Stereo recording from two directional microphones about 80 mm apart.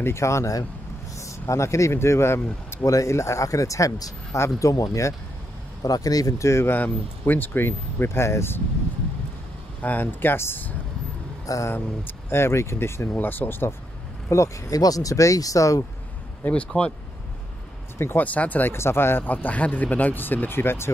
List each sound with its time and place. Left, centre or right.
0.0 s speech: left
2.8 s speech: left
9.8 s speech: left
11.4 s speech: left
11.7 s speech: left
14.3 s speech: left
16.4 s speech: centre
17.9 s speech: left
18.2 s speech: centre